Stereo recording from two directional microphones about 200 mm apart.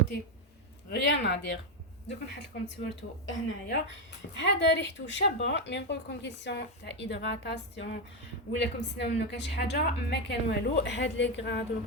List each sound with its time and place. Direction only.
0.9 s a woman's voice: 60° left (ahead or behind)